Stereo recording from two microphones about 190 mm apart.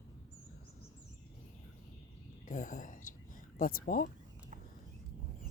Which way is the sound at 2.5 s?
45° left (ahead or behind).